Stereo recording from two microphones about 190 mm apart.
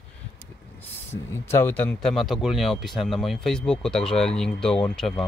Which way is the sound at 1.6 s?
10° left (ahead or behind).